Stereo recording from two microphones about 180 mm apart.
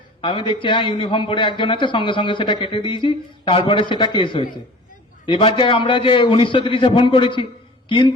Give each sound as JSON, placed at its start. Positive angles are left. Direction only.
{"t": 0.2, "sound": "a man's voice", "side_deg": 30}